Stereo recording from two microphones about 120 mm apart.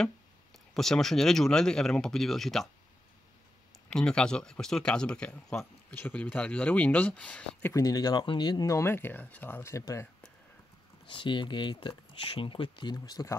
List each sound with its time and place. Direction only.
0.7 s speech: 5° left (ahead or behind)
3.9 s speech: 5° left (ahead or behind)
7.7 s speech: 35° left (ahead or behind)
11.1 s speech: 45° left (ahead or behind)